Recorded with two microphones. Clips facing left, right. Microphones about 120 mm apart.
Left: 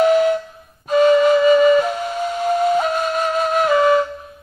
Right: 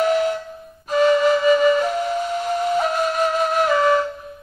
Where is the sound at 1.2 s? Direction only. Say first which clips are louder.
Left 3 dB; 15° left (ahead or behind).